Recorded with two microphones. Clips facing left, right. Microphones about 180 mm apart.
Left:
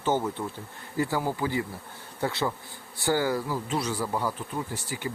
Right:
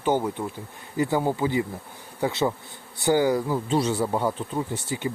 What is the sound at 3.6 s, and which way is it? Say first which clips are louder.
Speech: right 6 dB; 30° right (ahead or behind).